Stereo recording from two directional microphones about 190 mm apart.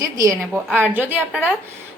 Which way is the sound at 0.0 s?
15° right (ahead or behind).